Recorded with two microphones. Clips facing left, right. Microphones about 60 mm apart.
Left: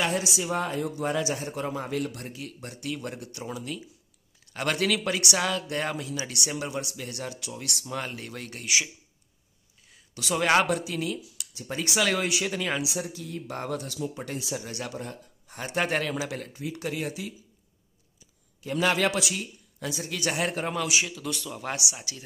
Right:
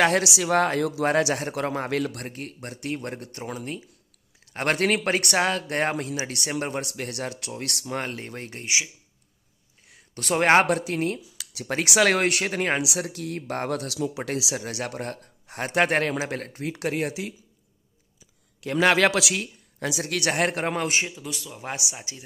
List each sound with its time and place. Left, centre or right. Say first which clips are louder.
0.0 s speech: right 6 dB; right
8.2 s a man's voice: right 2 dB; right
10.1 s speech: right 4 dB; right
11.5 s speech: right 5 dB; right
12.8 s speech: right 3 dB; right
18.6 s speech: right 5 dB; right
20.7 s a man's voice: right 2 dB; right
21.3 s speech: left 2 dB; centre
21.5 s speech: left 1 dB; right